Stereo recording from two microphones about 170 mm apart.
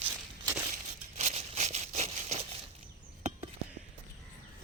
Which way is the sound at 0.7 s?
40° right (ahead or behind).